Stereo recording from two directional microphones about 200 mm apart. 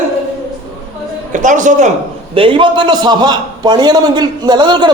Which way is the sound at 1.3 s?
40° right (ahead or behind).